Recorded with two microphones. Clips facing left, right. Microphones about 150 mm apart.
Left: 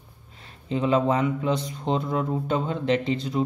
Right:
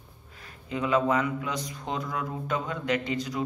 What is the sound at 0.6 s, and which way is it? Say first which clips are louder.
Speech: left 3 dB; 30° left (ahead or behind).